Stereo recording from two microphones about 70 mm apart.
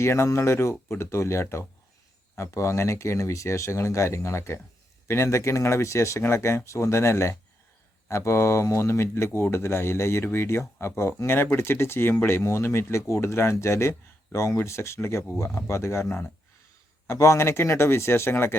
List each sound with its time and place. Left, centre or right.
0.0 s speech: left